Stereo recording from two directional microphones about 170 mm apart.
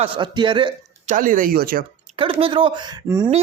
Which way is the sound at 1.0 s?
50° right (ahead or behind).